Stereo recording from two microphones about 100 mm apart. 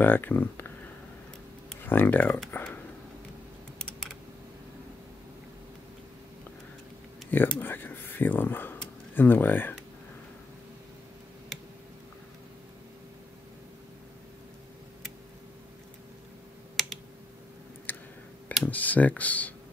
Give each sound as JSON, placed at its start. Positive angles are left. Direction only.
{"t": 0.0, "sound": "speech", "side_deg": 20}
{"t": 1.9, "sound": "speech", "side_deg": 20}
{"t": 2.5, "sound": "a sound", "side_deg": 20}
{"t": 3.8, "sound": "typing", "side_deg": 10}
{"t": 7.2, "sound": "speech", "side_deg": 20}
{"t": 7.6, "sound": "a sound", "side_deg": 20}
{"t": 16.8, "sound": "computer keyboard", "side_deg": 0}
{"t": 17.9, "sound": "a sound", "side_deg": 20}
{"t": 18.7, "sound": "speech", "side_deg": 15}